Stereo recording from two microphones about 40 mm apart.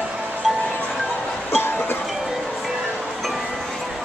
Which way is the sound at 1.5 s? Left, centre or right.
Left.